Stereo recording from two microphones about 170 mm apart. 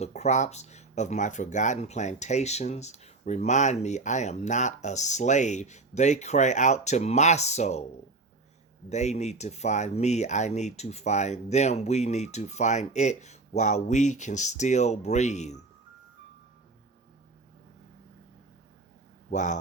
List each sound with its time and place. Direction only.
0.0 s speech: 40° left (ahead or behind)
8.9 s speech: 40° left (ahead or behind)
19.3 s speech: 45° left (ahead or behind)